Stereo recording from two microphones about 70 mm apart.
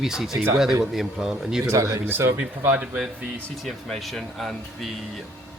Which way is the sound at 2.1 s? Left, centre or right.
Right.